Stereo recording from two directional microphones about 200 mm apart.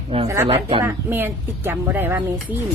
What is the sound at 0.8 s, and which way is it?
A woman's voice, 10° right (ahead or behind).